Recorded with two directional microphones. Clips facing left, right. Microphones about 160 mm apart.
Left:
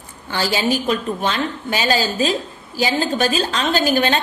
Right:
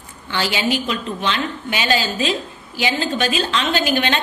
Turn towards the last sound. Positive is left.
turn(degrees=40)  # may be behind; listen again after turning